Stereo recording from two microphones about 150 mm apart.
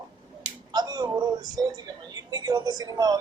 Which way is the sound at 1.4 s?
25° right (ahead or behind).